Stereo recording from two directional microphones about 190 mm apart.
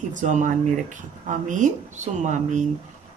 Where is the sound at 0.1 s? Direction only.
40° right (ahead or behind).